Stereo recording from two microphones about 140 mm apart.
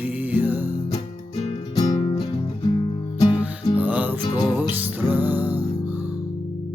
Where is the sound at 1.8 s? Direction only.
30° left (ahead or behind).